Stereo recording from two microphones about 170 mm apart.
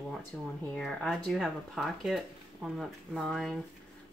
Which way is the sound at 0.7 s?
5° left (ahead or behind).